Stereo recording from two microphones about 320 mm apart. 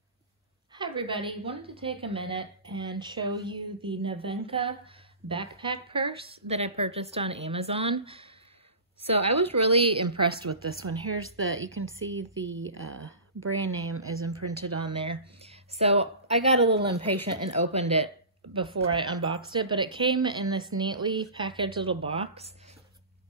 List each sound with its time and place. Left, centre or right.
0.7 s speech: centre
10.5 s a woman's voice: right
15.0 s speech: centre